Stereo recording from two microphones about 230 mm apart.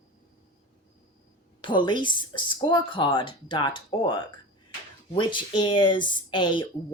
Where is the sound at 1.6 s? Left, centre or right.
Left.